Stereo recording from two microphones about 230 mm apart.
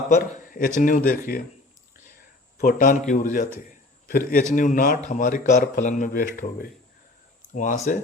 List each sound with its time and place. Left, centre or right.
0.1 s a man's voice: left